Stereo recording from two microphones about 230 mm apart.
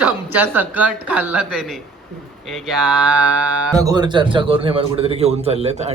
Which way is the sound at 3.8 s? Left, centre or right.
Centre.